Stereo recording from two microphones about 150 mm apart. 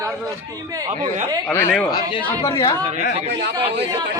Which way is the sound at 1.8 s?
30° left (ahead or behind).